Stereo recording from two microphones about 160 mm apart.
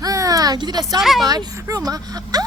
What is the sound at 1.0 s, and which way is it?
Speech, centre (ahead or behind).